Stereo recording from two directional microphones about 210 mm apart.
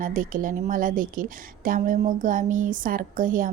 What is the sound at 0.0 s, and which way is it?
A woman's voice, 40° right (ahead or behind).